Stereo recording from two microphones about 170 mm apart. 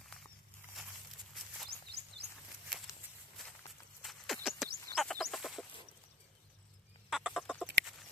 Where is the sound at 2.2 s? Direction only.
90° right.